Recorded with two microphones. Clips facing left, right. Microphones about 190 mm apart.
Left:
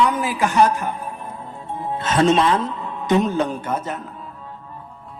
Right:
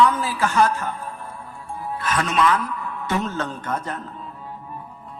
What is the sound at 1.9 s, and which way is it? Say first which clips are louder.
A man's voice: left 7 dB; 25° left (ahead or behind).